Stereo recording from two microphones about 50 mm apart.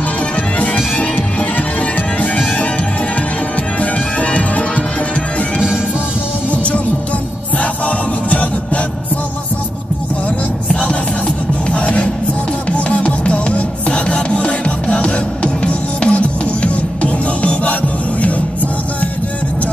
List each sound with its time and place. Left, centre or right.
0.6 s music: left
3.8 s music: left
11.7 s music: left